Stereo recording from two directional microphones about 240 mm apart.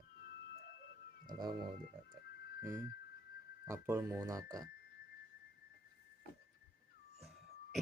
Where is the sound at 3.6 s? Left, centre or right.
Centre.